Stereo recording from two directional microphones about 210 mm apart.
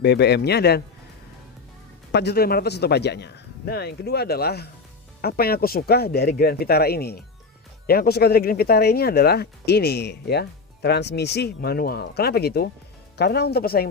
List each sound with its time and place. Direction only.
0.0 s speech: 50° left (ahead or behind)
2.1 s speech: 50° left (ahead or behind)